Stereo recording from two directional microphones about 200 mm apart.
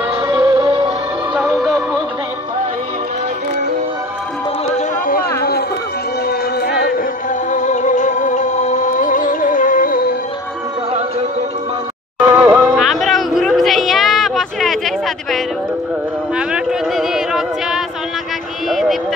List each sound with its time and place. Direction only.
0.3 s music: 15° right (ahead or behind)
1.3 s music: centre (ahead or behind)
4.7 s a sound: 45° left (ahead or behind)
6.2 s music: 50° left (ahead or behind)
7.5 s music: 40° left (ahead or behind)
10.9 s music: 30° right (ahead or behind)
12.2 s music: 10° right (ahead or behind)
12.6 s music: centre (ahead or behind)
16.3 s a sound: 5° right (ahead or behind)